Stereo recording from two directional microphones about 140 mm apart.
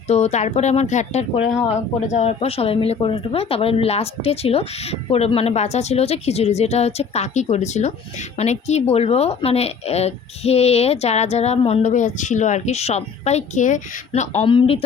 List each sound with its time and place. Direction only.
0.1 s speech: 50° left (ahead or behind)
14.4 s speech: 40° left (ahead or behind)